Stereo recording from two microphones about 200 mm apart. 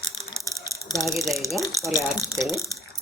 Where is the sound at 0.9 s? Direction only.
Centre (ahead or behind).